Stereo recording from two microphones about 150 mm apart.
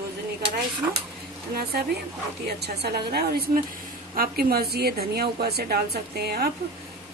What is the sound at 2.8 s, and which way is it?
Speech, 90° right.